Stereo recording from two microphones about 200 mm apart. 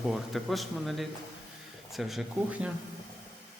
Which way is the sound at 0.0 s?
Centre (ahead or behind).